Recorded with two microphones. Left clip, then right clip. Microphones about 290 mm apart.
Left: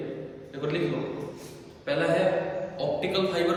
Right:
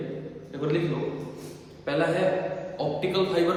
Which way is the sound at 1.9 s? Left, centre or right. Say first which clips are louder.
Even; centre.